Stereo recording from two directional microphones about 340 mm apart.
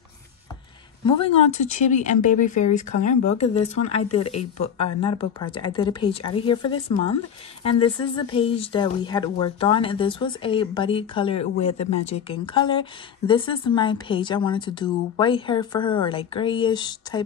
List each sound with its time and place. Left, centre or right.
1.0 s speech: centre